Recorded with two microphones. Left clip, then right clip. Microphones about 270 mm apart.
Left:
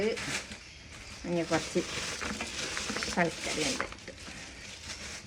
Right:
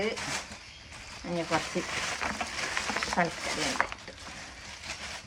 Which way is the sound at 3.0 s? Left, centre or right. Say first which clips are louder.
Even; centre.